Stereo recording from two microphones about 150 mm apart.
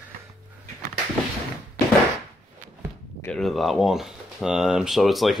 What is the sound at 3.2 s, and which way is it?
Speech, 5° left (ahead or behind).